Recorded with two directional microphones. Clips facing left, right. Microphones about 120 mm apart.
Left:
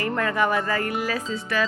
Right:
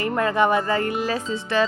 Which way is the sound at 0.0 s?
25° right (ahead or behind).